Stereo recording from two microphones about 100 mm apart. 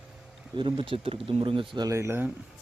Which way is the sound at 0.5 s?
55° right (ahead or behind).